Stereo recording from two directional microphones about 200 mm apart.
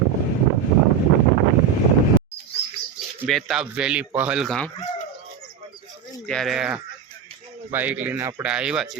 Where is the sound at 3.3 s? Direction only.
Centre (ahead or behind).